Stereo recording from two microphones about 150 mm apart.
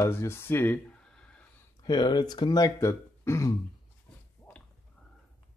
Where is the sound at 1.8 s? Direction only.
30° left (ahead or behind).